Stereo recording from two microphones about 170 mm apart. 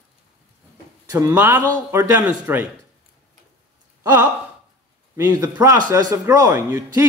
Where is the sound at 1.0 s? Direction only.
15° right (ahead or behind).